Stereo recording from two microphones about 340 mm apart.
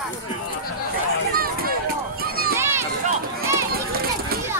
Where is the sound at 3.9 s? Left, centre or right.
Right.